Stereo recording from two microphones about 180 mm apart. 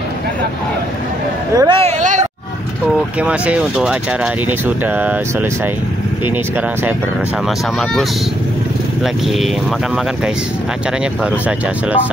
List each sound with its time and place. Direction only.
1.6 s speech: 30° right (ahead or behind)
3.2 s speech: 5° right (ahead or behind)